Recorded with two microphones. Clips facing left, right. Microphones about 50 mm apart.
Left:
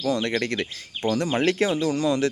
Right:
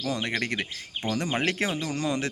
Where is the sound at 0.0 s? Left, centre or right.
Centre.